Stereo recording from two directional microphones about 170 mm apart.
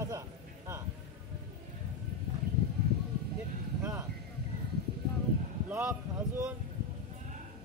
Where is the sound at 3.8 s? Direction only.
15° right (ahead or behind).